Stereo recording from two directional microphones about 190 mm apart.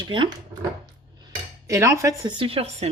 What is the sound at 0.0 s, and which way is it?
A man's voice, 25° right (ahead or behind).